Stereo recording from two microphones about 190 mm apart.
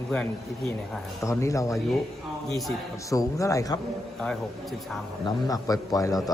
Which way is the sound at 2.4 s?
Centre (ahead or behind).